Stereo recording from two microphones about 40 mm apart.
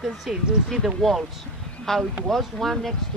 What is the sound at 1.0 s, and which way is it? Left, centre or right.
Speech, centre.